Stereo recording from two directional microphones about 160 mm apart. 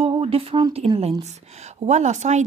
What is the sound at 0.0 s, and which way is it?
A woman's voice, 35° right (ahead or behind).